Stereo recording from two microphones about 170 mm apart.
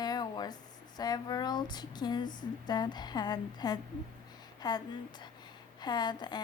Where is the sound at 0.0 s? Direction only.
25° left (ahead or behind).